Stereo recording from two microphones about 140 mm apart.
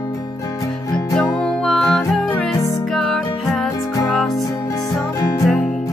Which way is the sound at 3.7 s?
25° left (ahead or behind).